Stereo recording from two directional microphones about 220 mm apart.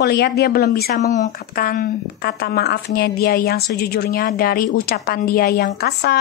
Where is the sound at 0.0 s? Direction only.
45° left (ahead or behind).